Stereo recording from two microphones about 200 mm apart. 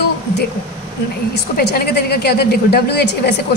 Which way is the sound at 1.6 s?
50° left (ahead or behind).